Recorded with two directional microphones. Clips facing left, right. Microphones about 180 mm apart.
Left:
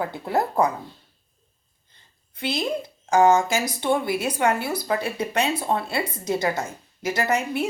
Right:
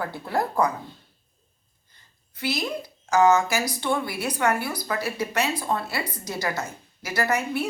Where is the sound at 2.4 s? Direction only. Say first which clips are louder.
Left 2 dB; 30° left (ahead or behind).